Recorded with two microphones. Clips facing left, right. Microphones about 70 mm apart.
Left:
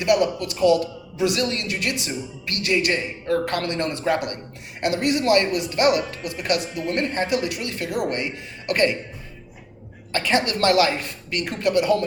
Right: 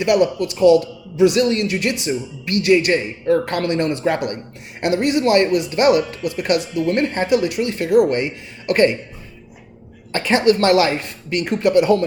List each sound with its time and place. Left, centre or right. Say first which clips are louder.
0.0 s speech: right 4 dB; right
10.1 s speech: right 6 dB; right